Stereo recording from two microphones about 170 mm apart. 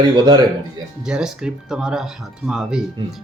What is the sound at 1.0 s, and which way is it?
Speech, 5° right (ahead or behind).